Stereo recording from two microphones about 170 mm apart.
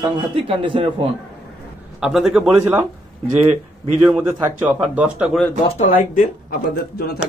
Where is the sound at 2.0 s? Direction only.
Centre (ahead or behind).